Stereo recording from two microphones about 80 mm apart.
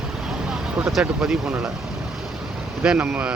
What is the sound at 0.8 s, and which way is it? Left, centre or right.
Speech, centre.